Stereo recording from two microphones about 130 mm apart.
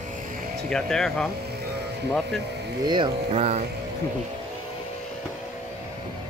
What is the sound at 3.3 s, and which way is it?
Music, 55° right (ahead or behind).